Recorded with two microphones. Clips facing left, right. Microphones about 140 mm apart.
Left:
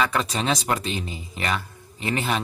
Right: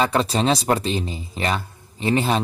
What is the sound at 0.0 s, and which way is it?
Speech, 30° right (ahead or behind).